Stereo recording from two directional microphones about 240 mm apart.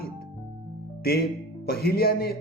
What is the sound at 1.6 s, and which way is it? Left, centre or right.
Speech, left.